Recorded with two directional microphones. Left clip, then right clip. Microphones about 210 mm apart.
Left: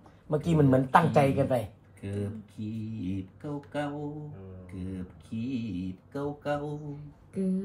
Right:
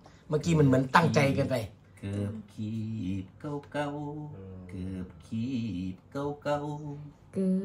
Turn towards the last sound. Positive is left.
turn(degrees=0)  # may be behind; listen again after turning